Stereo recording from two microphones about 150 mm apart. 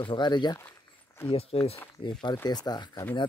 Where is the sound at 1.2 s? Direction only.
40° left (ahead or behind).